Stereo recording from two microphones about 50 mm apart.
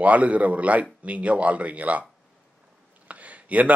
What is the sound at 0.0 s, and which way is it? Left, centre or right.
Speech, right.